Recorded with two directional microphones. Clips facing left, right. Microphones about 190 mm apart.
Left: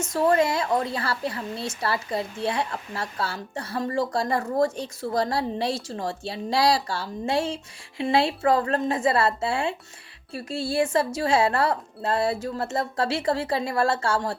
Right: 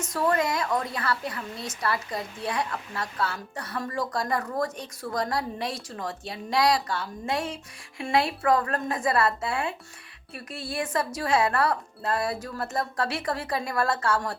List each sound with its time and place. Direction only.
0.0 s a woman's voice: 25° left (ahead or behind)